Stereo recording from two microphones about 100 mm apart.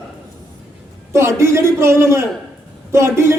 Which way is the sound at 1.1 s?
30° right (ahead or behind).